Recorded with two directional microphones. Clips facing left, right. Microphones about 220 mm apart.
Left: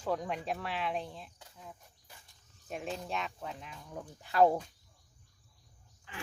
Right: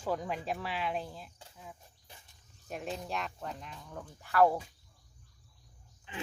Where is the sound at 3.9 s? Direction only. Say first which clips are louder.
Even; 15° left (ahead or behind).